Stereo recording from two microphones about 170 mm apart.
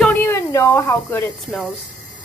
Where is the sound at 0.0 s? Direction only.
10° left (ahead or behind).